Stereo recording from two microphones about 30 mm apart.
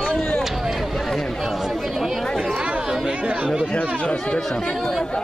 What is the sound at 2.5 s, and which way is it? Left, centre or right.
Chatter, right.